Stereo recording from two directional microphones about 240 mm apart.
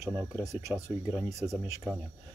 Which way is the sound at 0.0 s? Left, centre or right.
Centre.